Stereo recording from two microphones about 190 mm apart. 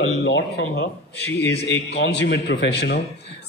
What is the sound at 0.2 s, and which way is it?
A man's voice, 65° left (ahead or behind).